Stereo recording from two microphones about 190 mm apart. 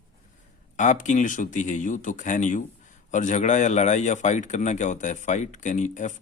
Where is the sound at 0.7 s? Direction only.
40° left (ahead or behind).